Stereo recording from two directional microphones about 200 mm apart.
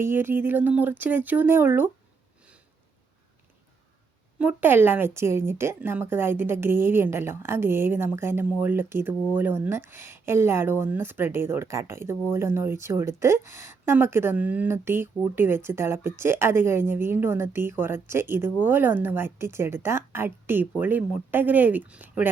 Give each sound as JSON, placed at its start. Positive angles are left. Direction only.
{"t": 0.0, "sound": "a woman's voice", "side_deg": -10}
{"t": 4.4, "sound": "a woman's voice", "side_deg": -10}